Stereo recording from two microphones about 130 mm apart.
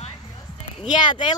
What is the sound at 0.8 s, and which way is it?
Speech, 35° left (ahead or behind).